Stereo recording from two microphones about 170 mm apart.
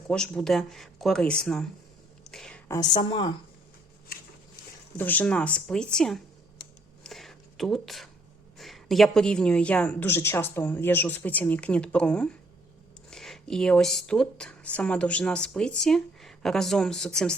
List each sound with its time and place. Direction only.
0.1 s speech: 5° left (ahead or behind)
2.3 s a sound: 5° left (ahead or behind)
2.6 s a woman's voice: 20° left (ahead or behind)
4.9 s a woman's voice: 10° left (ahead or behind)
7.0 s a sound: centre (ahead or behind)
8.5 s a woman's voice: centre (ahead or behind)